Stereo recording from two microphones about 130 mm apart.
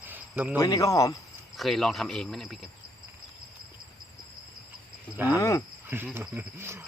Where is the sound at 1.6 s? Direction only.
Centre (ahead or behind).